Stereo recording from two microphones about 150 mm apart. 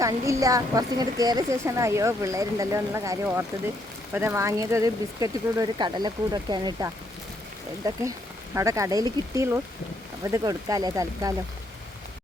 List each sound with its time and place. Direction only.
0.0 s a woman's voice: 20° right (ahead or behind)